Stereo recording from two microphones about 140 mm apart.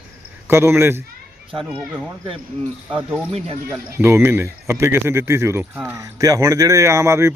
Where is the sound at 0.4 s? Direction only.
15° right (ahead or behind).